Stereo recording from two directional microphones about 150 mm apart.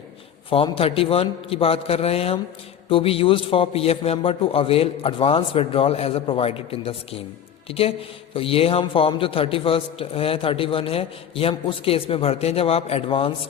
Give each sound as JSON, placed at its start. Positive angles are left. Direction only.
{"t": 0.5, "sound": "a man's voice", "side_deg": 40}